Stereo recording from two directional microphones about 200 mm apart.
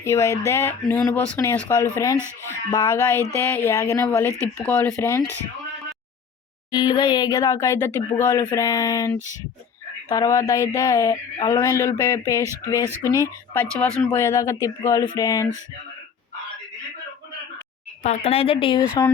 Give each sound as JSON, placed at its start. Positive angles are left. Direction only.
{"t": 0.0, "sound": "speech", "side_deg": 15}
{"t": 6.7, "sound": "speech", "side_deg": 20}
{"t": 18.0, "sound": "speech", "side_deg": 35}